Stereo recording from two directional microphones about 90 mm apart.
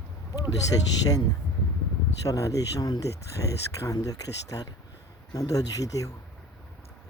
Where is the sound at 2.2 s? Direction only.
40° left (ahead or behind).